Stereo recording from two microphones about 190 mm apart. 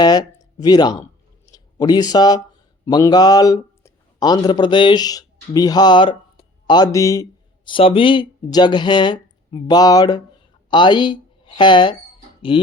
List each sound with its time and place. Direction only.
0.0 s a man's voice: 20° left (ahead or behind)